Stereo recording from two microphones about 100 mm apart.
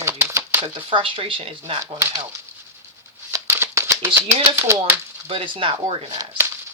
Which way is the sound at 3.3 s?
25° right (ahead or behind).